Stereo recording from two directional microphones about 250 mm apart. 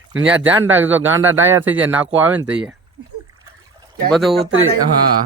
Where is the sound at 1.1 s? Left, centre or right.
Right.